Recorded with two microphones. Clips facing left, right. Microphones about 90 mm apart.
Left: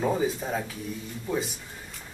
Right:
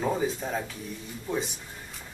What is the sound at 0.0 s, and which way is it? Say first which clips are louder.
Speech: left 2 dB; 5° left (ahead or behind).